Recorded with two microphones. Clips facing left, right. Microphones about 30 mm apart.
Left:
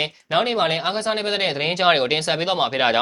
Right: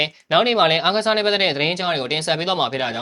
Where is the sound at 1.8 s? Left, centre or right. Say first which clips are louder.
Left 5 dB; left.